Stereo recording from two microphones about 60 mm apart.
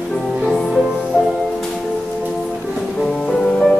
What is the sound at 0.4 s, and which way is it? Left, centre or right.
Music, centre.